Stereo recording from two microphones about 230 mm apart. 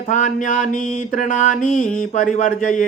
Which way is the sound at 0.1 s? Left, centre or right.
Left.